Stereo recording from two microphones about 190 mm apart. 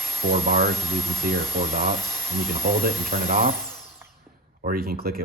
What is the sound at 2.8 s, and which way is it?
Speech, 55° right (ahead or behind).